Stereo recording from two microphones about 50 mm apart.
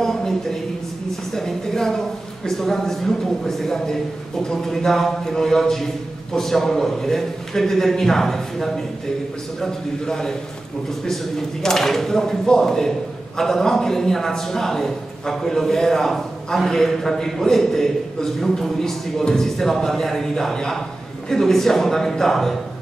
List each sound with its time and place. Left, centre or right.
0.0 s a sound: centre
1.3 s a woman's voice: centre
11.6 s a man's voice: centre